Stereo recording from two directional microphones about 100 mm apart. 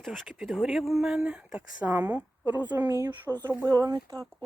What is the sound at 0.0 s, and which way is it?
Speech, centre (ahead or behind).